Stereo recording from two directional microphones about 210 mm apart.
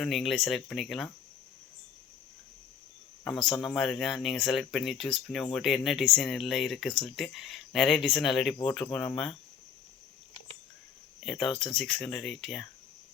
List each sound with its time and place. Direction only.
0.0 s speech: centre (ahead or behind)
3.2 s speech: 5° left (ahead or behind)
11.3 s speech: 25° left (ahead or behind)
11.7 s speech: 5° left (ahead or behind)